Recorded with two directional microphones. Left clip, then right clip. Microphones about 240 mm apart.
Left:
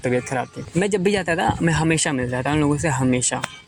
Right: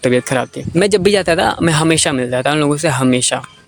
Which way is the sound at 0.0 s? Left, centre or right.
Right.